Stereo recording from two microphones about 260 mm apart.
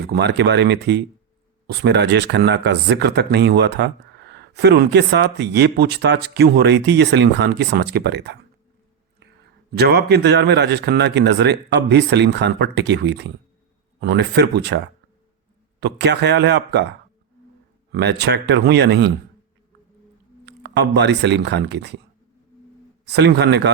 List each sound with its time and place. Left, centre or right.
0.0 s speech: right
9.7 s speech: right
15.8 s speech: right
17.9 s speech: right
20.4 s speech: right
23.0 s speech: right